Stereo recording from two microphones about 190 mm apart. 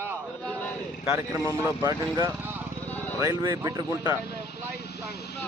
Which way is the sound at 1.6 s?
20° right (ahead or behind).